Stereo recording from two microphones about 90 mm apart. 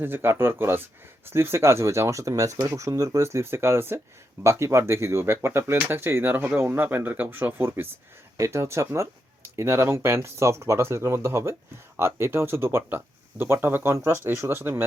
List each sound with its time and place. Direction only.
0.0 s speech: 25° right (ahead or behind)